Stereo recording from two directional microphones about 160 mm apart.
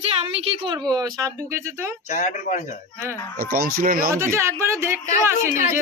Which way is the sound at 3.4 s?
65° right (ahead or behind).